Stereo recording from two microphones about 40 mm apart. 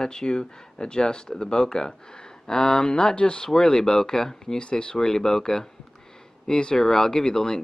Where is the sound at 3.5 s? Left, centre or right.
Centre.